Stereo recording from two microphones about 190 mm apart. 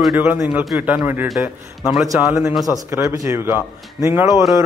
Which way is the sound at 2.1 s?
15° right (ahead or behind).